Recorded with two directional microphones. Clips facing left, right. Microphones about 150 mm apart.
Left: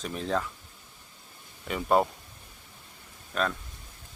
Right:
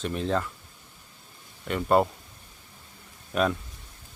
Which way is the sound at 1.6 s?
Centre (ahead or behind).